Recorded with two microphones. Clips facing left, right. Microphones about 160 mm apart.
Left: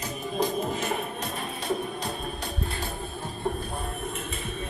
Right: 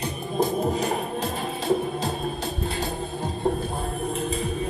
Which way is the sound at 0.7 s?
35° right (ahead or behind).